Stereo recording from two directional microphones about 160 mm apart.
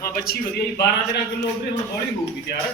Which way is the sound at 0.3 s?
70° left (ahead or behind).